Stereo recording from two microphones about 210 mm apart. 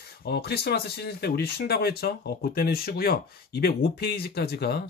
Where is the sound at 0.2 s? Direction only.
50° left (ahead or behind).